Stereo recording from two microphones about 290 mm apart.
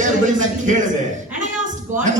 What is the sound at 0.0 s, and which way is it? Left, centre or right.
Speech, right.